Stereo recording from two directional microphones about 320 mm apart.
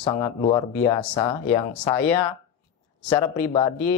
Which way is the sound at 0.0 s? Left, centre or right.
Centre.